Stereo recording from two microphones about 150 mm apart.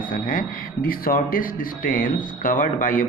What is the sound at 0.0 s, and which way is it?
Speech, 65° left (ahead or behind).